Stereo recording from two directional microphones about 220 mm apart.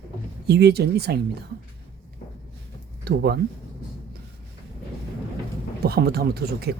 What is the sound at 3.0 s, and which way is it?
Speech, 50° right (ahead or behind).